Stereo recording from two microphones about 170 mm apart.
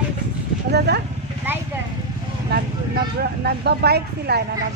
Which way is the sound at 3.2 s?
70° right (ahead or behind).